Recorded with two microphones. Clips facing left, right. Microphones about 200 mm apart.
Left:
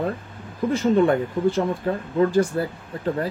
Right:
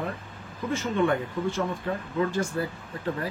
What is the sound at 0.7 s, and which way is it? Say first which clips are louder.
Speech: left 7 dB; 35° left (ahead or behind).